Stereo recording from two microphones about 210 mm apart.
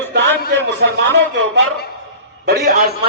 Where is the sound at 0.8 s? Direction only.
55° right (ahead or behind).